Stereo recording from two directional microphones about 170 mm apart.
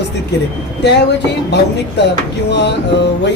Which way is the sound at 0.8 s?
90° left.